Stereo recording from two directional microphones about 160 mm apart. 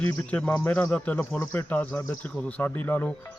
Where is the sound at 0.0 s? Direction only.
10° left (ahead or behind).